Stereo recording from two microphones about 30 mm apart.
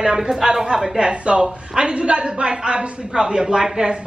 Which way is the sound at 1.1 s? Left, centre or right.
Right.